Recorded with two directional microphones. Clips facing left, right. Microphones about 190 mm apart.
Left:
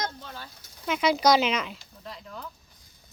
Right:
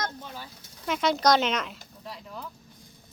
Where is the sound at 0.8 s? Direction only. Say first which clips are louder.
Left 1 dB; centre (ahead or behind).